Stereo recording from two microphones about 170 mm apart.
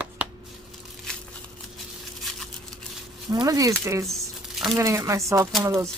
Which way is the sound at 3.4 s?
20° right (ahead or behind).